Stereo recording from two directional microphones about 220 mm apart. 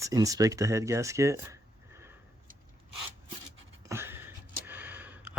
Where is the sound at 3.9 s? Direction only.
10° right (ahead or behind).